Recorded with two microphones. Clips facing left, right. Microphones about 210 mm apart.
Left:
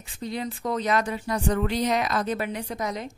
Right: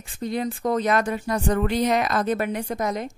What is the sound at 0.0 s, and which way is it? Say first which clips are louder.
A woman's voice: right 5 dB; 50° right (ahead or behind).